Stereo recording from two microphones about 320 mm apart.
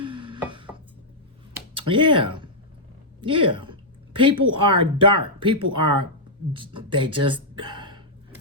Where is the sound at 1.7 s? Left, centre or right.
Centre.